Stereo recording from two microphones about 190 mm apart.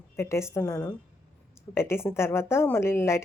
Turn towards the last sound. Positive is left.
turn(degrees=15)  # may be behind; listen again after turning